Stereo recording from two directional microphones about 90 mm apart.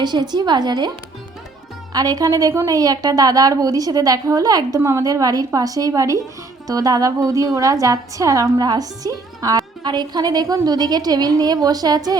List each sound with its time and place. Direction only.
0.0 s a woman's voice: 50° right (ahead or behind)
1.9 s a woman's voice: 45° right (ahead or behind)
4.8 s a woman's voice: 35° right (ahead or behind)